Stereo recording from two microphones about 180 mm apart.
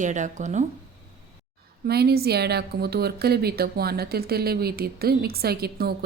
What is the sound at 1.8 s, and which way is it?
A woman's voice, 60° right (ahead or behind).